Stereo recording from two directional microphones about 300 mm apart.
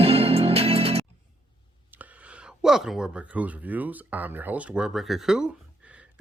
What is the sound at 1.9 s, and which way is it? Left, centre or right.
Speech, centre.